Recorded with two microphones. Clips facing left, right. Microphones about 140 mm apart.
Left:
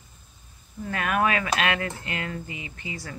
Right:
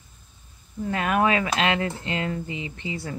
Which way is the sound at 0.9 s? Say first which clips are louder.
Right 2 dB; 25° right (ahead or behind).